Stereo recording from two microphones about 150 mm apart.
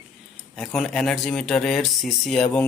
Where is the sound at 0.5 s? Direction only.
Centre (ahead or behind).